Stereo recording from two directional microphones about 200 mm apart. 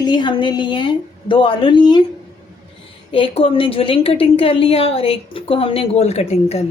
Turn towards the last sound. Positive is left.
turn(degrees=30)  # may be behind; listen again after turning